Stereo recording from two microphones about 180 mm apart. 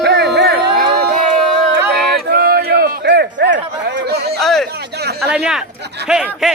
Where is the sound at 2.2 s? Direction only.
55° right (ahead or behind).